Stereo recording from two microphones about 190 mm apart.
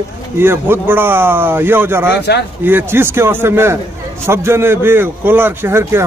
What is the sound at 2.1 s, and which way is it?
Speech, 60° left (ahead or behind).